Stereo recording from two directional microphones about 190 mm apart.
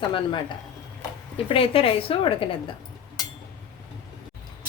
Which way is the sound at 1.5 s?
30° left (ahead or behind).